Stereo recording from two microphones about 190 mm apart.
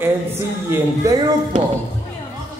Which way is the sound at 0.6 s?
15° right (ahead or behind).